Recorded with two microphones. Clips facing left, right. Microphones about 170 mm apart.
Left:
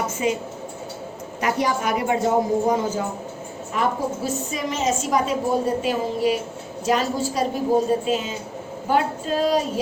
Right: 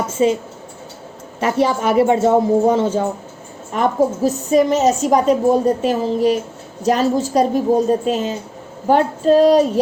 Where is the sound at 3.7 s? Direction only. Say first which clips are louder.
Right 7 dB; 40° right (ahead or behind).